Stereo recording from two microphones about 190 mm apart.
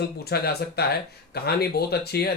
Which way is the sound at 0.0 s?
55° left (ahead or behind).